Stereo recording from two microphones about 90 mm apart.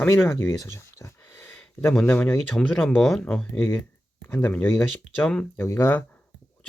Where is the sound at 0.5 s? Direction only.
35° left (ahead or behind).